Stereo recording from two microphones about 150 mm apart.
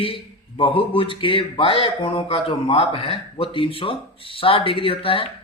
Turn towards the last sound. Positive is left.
turn(degrees=35)  # may be behind; listen again after turning